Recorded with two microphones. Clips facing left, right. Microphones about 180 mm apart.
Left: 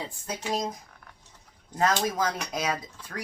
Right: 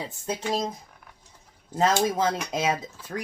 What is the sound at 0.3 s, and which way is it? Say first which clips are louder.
Speech: right 3 dB; 30° right (ahead or behind).